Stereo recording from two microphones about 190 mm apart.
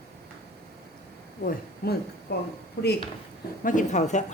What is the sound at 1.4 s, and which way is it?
Speech, 55° left (ahead or behind).